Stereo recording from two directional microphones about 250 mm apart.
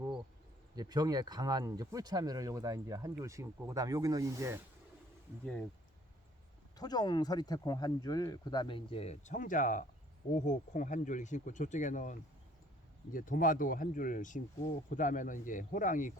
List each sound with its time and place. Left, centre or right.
0.8 s speech: centre
6.7 s speech: centre
13.1 s speech: left